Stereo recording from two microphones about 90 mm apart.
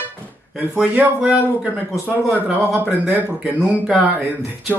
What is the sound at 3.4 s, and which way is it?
Speech, 10° right (ahead or behind).